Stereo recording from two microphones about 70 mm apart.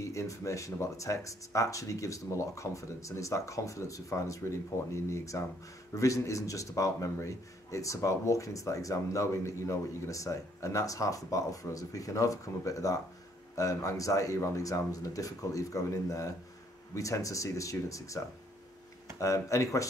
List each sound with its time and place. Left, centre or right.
0.0 s speech: left